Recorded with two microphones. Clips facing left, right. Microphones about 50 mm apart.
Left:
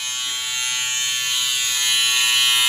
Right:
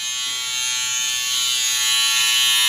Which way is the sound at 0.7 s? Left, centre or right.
Centre.